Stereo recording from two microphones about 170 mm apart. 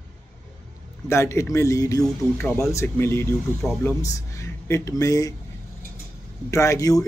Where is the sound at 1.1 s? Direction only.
15° left (ahead or behind).